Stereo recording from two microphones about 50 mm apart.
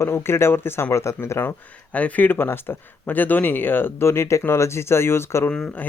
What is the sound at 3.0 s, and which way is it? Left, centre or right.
Speech, left.